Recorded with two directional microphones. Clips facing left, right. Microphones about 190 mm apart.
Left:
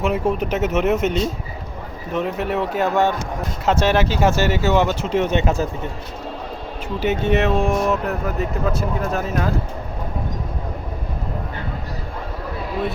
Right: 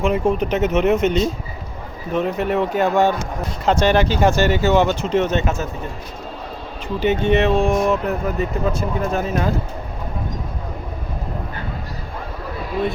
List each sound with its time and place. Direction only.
0.0 s speech: 5° left (ahead or behind)
5.5 s speech: 35° left (ahead or behind)
6.8 s speech: 5° left (ahead or behind)